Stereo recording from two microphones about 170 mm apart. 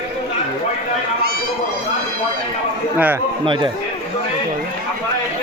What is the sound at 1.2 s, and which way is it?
Run, 60° right (ahead or behind).